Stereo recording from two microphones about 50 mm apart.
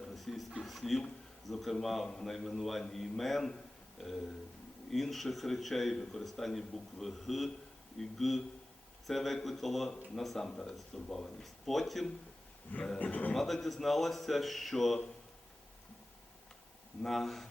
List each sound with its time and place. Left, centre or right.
0.1 s a sound: centre
1.8 s a man's voice: centre
4.9 s a man's voice: centre
13.0 s speech: left
13.3 s a man's voice: centre
17.0 s a man's voice: centre